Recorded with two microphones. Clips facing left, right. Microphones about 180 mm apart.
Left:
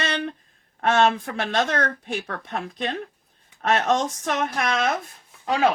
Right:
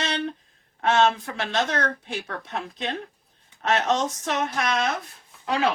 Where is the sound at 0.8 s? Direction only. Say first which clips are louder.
Left 1 dB; 55° left (ahead or behind).